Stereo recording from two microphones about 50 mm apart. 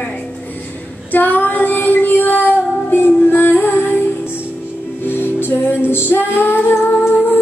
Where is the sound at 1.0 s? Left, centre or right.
Left.